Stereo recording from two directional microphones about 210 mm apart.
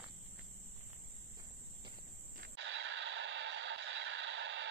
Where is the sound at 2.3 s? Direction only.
55° right (ahead or behind).